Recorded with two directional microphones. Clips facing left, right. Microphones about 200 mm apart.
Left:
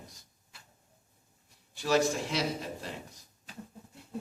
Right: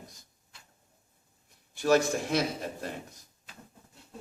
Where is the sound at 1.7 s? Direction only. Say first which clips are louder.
Right 3 dB; 50° right (ahead or behind).